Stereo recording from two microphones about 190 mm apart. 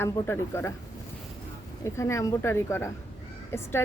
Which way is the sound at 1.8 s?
15° left (ahead or behind).